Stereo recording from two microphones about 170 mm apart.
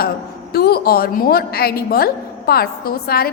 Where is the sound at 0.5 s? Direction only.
65° left (ahead or behind).